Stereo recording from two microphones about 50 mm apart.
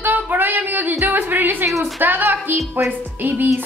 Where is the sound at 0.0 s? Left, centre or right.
Right.